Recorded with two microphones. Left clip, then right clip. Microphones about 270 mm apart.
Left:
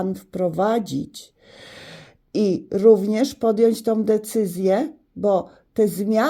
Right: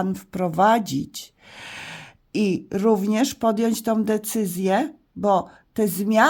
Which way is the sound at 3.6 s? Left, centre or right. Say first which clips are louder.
Left 5 dB; centre.